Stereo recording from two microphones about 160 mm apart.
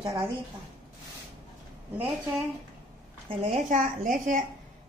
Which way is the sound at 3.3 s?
40° right (ahead or behind).